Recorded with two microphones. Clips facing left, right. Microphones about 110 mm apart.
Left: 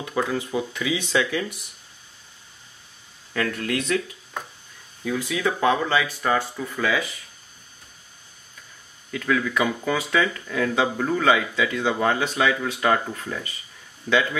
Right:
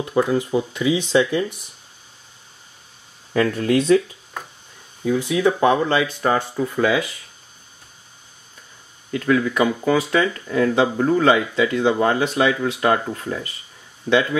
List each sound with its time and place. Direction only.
0.0 s speech: 20° right (ahead or behind)
3.3 s speech: 25° right (ahead or behind)
5.0 s speech: 20° right (ahead or behind)
9.1 s speech: 15° right (ahead or behind)
14.1 s speech: 20° right (ahead or behind)